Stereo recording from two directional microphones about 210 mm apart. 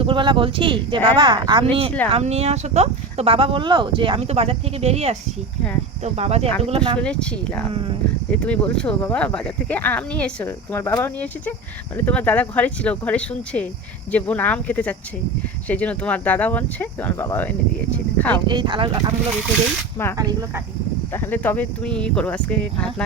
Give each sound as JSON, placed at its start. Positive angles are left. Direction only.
{"t": 0.0, "sound": "speech", "side_deg": -25}
{"t": 6.1, "sound": "speech", "side_deg": -30}
{"t": 7.0, "sound": "speech", "side_deg": 5}
{"t": 7.7, "sound": "speech", "side_deg": -25}
{"t": 8.3, "sound": "speech", "side_deg": 5}
{"t": 18.4, "sound": "speech", "side_deg": -20}
{"t": 21.1, "sound": "speech", "side_deg": 10}